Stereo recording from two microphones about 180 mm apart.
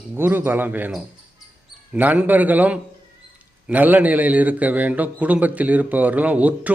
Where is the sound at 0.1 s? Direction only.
10° right (ahead or behind).